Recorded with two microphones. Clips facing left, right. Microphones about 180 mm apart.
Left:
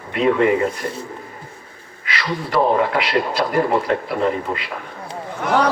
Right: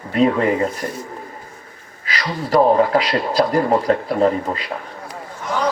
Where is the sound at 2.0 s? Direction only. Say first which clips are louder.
Even; 35° right (ahead or behind).